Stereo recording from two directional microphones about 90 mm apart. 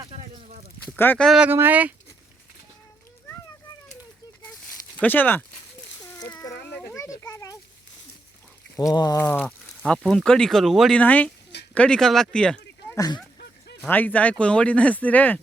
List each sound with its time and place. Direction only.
0.9 s speech: 20° left (ahead or behind)
1.5 s speech: 25° right (ahead or behind)
4.9 s speech: 20° left (ahead or behind)
6.8 s a sound: 35° left (ahead or behind)
8.7 s a sound: 45° left (ahead or behind)
9.1 s speech: 25° left (ahead or behind)
9.6 s speech: 5° left (ahead or behind)
10.9 s speech: 15° left (ahead or behind)
13.8 s speech: 20° left (ahead or behind)